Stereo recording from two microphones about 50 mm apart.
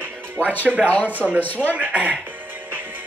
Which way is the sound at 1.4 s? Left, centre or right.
Left.